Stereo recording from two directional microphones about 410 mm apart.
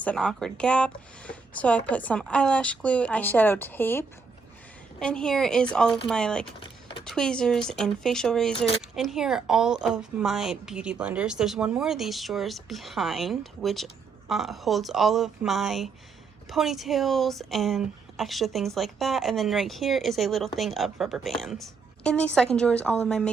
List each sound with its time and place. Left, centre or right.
0.0 s a woman's voice: centre
6.6 s power windows: centre
7.0 s a woman's voice: centre